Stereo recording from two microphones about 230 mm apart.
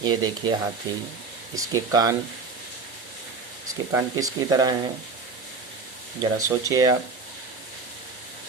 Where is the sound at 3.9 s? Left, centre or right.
Centre.